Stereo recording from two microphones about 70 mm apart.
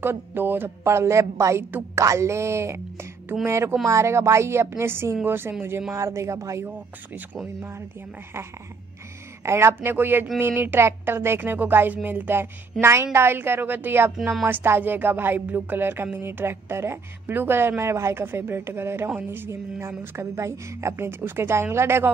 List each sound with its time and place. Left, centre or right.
0.0 s speech: right
5.9 s speech: right
9.4 s speech: right